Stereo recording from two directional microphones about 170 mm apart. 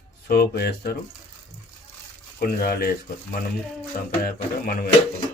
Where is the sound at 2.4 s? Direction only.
60° left (ahead or behind).